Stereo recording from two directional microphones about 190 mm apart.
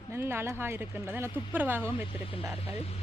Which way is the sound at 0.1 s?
10° right (ahead or behind).